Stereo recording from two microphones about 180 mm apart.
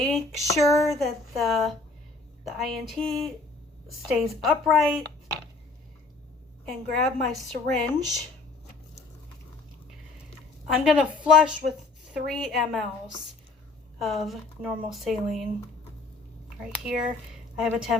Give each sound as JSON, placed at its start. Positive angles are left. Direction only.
{"t": 0.0, "sound": "a sound", "side_deg": 5}
{"t": 0.4, "sound": "a sound", "side_deg": 15}
{"t": 0.8, "sound": "speech", "side_deg": 0}
{"t": 6.7, "sound": "speech", "side_deg": 0}
{"t": 10.8, "sound": "speech", "side_deg": -5}
{"t": 14.0, "sound": "speech", "side_deg": 0}
{"t": 16.9, "sound": "speech", "side_deg": -5}